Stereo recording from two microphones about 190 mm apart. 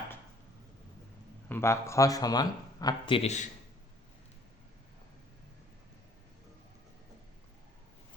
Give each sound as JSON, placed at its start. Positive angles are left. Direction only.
{"t": 1.5, "sound": "a man's voice", "side_deg": 10}